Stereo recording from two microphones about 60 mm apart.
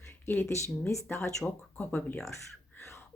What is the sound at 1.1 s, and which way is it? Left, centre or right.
Speech, left.